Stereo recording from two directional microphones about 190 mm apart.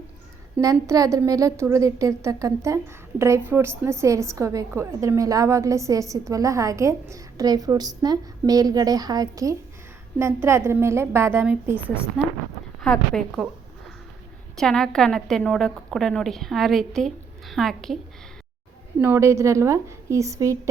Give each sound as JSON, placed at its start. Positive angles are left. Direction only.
{"t": 0.6, "sound": "a woman's voice", "side_deg": -15}
{"t": 12.8, "sound": "a woman's voice", "side_deg": 5}
{"t": 14.5, "sound": "a woman's voice", "side_deg": 5}
{"t": 18.9, "sound": "a woman's voice", "side_deg": -10}